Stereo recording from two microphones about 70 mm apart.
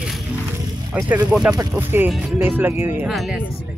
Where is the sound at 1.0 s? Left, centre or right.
Centre.